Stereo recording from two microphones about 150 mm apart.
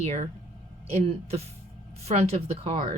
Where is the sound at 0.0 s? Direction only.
45° right (ahead or behind).